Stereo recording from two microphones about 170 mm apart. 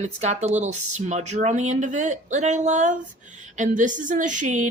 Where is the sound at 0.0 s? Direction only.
45° right (ahead or behind).